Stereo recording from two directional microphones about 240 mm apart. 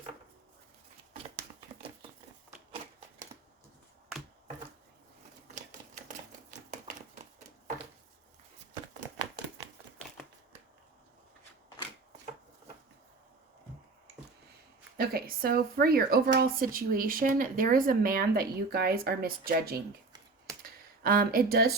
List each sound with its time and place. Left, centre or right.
6.7 s typewriter: right
14.9 s speech: right
20.6 s a sound: right